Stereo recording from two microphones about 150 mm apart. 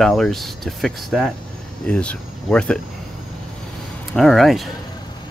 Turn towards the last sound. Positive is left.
turn(degrees=0)  # may be behind; listen again after turning